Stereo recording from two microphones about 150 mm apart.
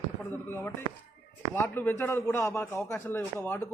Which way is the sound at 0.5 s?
15° left (ahead or behind).